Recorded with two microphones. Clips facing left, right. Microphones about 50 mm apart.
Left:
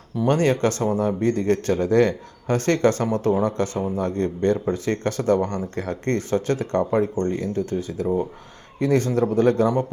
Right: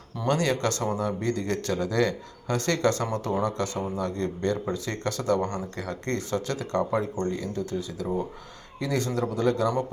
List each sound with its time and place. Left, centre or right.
0.3 s a man's voice: left
5.4 s speech: left
5.7 s a man's voice: left